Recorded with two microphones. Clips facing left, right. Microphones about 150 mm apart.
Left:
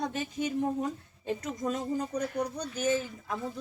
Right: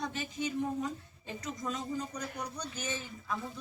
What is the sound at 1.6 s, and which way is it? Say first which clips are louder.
Speech: left 4 dB; 50° left (ahead or behind).